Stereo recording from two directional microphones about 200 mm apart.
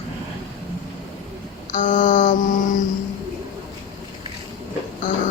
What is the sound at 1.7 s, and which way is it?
Speech, 40° left (ahead or behind).